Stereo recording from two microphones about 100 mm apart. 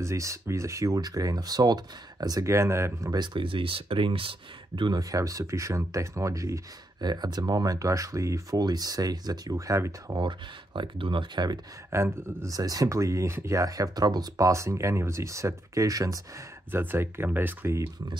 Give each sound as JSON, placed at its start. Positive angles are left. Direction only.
{"t": 0.0, "sound": "speech", "side_deg": -30}
{"t": 3.1, "sound": "speech", "side_deg": -50}
{"t": 4.9, "sound": "speech", "side_deg": -35}
{"t": 7.0, "sound": "speech", "side_deg": -45}
{"t": 10.1, "sound": "speech", "side_deg": -55}
{"t": 11.9, "sound": "speech", "side_deg": -25}
{"t": 12.5, "sound": "speech", "side_deg": -40}
{"t": 16.7, "sound": "speech", "side_deg": -20}